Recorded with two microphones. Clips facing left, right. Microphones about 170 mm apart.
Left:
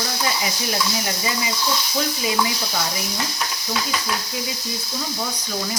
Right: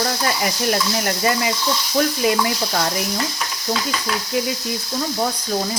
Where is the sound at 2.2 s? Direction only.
55° right (ahead or behind).